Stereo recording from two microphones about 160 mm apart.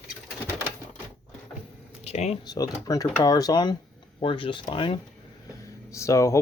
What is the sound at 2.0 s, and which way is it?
Speech, 45° left (ahead or behind).